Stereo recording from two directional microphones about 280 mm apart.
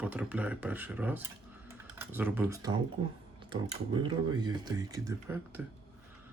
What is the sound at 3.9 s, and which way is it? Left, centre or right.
Speech, centre.